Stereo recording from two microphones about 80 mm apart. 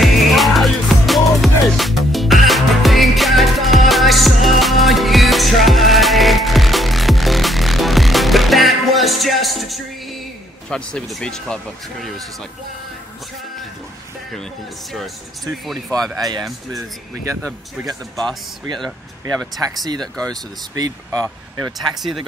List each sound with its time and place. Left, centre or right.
0.0 s music: centre
10.7 s speech: centre
14.3 s speech: centre
16.2 s speech: right
17.8 s speech: centre
18.7 s speech: right
19.7 s speech: right
20.0 s speech: centre
20.7 s speech: right